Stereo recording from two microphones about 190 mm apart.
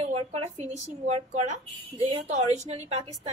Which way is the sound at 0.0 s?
30° right (ahead or behind).